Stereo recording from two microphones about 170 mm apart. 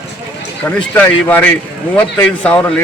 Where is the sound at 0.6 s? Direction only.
10° left (ahead or behind).